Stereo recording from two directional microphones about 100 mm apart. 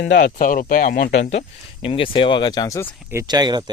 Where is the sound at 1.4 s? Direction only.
60° left (ahead or behind); by 2.8 s 40° left (ahead or behind).